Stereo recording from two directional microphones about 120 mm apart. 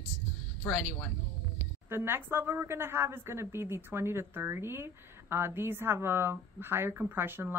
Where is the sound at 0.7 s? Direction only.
5° left (ahead or behind).